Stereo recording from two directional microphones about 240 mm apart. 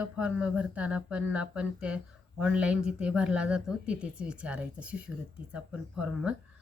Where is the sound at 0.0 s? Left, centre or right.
Centre.